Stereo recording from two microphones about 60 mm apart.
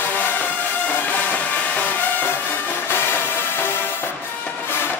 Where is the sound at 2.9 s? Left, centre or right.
Left.